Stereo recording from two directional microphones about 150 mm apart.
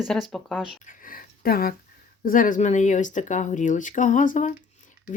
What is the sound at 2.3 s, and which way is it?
Speech, 65° left (ahead or behind).